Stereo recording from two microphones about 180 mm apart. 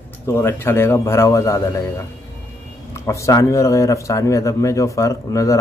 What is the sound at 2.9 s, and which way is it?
Speech, 15° left (ahead or behind).